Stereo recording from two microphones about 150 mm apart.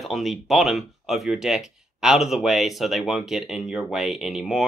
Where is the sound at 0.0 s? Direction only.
Centre (ahead or behind).